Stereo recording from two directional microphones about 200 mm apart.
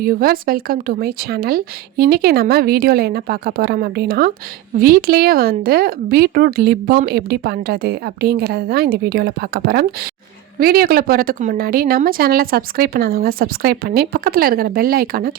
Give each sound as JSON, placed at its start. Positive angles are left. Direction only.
{"t": 0.0, "sound": "speech", "side_deg": -50}